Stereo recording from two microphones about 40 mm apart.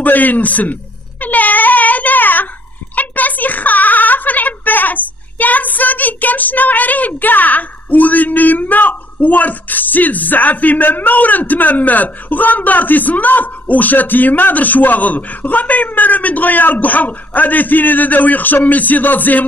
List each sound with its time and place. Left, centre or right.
0.0 s a man's voice: left
1.2 s a sound: left
3.0 s speech: left